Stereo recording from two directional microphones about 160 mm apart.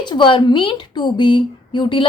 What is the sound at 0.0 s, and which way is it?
A woman's voice, 30° left (ahead or behind).